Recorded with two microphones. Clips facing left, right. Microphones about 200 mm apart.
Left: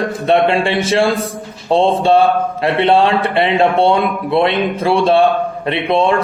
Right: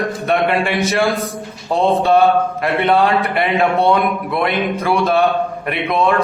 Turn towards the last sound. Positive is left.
turn(degrees=30)  # may be behind; listen again after turning